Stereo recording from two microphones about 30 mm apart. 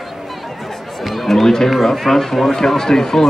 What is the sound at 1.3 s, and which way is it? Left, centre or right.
Speech, centre.